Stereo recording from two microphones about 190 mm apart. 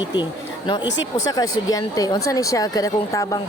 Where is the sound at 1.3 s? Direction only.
20° left (ahead or behind).